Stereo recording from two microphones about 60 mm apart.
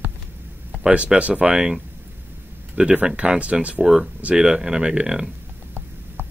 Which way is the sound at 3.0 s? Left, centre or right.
Centre.